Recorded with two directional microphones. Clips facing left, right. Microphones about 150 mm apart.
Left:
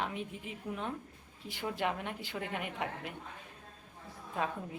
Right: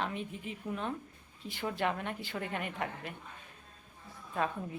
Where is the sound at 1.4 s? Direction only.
15° left (ahead or behind).